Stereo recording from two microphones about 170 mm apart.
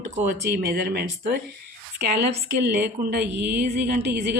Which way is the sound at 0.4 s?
65° right (ahead or behind).